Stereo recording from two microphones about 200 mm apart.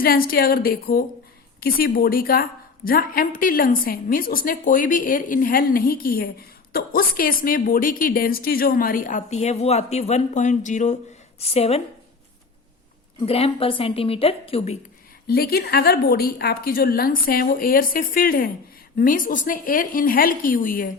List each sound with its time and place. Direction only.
0.0 s a woman's voice: 45° left (ahead or behind); by 11.8 s 30° left (ahead or behind)
13.2 s a woman's voice: 30° left (ahead or behind)
15.3 s a woman's voice: 50° left (ahead or behind)